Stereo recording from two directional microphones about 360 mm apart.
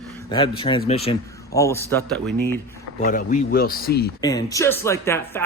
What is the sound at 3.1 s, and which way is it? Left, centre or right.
Speech, left.